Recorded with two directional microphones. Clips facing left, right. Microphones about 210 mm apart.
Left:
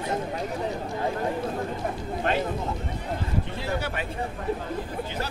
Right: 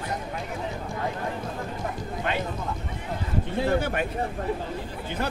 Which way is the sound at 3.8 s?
50° right (ahead or behind).